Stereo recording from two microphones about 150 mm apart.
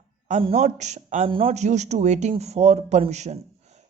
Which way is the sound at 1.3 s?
40° right (ahead or behind).